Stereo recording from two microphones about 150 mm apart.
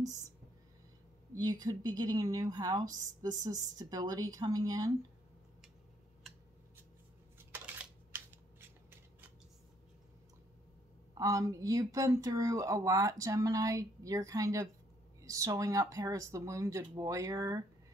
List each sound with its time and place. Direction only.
1.3 s speech: 25° right (ahead or behind)
7.3 s a sound: 10° right (ahead or behind)
11.1 s speech: 20° right (ahead or behind)